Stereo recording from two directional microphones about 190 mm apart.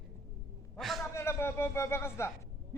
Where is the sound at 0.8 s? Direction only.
Centre (ahead or behind).